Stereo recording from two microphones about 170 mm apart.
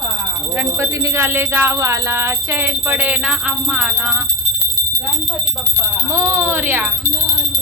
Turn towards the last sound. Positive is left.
turn(degrees=-10)  # may be behind; listen again after turning